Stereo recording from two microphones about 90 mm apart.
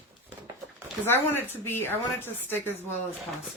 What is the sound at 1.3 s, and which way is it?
Speech, 25° left (ahead or behind).